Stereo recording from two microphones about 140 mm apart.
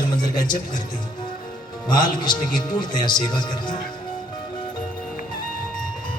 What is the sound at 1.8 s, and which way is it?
A man's voice, 30° left (ahead or behind).